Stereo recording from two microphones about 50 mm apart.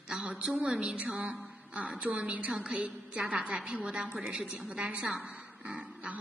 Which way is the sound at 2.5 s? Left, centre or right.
Centre.